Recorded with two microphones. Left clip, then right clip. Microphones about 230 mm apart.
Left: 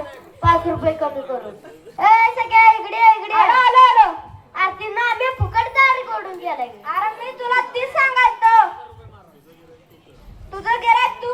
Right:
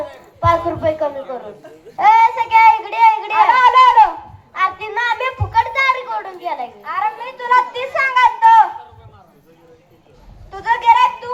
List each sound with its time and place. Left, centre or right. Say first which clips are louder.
0.3 s a woman's voice: right 1 dB; right
4.5 s a sound: right 2 dB; right
10.5 s speech: right 3 dB; right